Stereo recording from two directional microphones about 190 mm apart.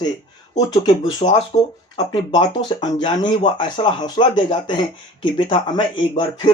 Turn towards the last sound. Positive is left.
turn(degrees=25)  # may be behind; listen again after turning